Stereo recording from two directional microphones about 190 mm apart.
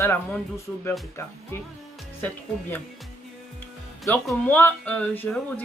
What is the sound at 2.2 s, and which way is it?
Speech, 10° left (ahead or behind).